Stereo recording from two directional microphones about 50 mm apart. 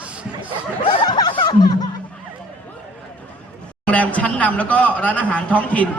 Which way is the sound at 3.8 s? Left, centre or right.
Left.